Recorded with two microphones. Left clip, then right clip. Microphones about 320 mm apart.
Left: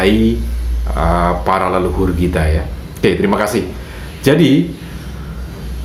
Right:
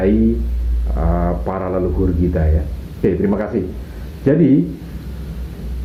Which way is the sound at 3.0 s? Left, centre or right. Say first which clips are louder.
Left 4 dB; left.